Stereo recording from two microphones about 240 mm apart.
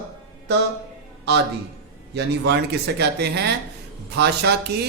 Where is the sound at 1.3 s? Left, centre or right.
Right.